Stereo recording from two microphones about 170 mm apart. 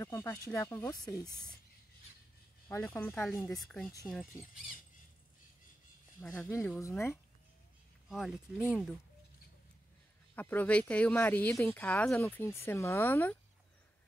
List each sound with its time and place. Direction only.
0.0 s speech: 15° left (ahead or behind)
2.8 s speech: 10° left (ahead or behind)
6.2 s speech: centre (ahead or behind)
6.8 s speech: 15° left (ahead or behind)
8.1 s speech: centre (ahead or behind)
10.3 s speech: 10° left (ahead or behind)